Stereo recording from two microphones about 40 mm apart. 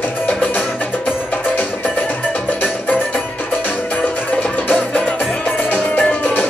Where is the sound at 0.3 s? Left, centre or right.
Left.